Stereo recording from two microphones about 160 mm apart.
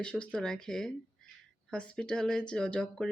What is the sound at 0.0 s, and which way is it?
Speech, 5° left (ahead or behind).